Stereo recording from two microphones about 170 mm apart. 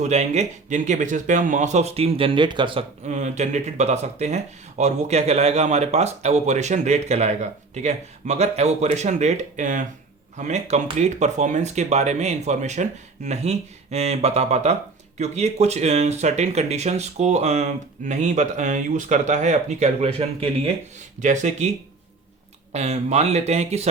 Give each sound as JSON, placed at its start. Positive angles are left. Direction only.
{"t": 0.0, "sound": "speech", "side_deg": -40}
{"t": 3.0, "sound": "speech", "side_deg": -45}
{"t": 22.7, "sound": "speech", "side_deg": -40}